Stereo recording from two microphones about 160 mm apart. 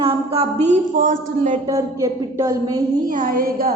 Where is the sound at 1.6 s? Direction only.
20° right (ahead or behind).